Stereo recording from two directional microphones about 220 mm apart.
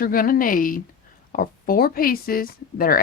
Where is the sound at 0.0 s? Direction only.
40° left (ahead or behind).